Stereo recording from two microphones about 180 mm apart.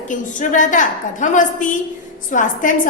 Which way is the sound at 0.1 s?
45° left (ahead or behind).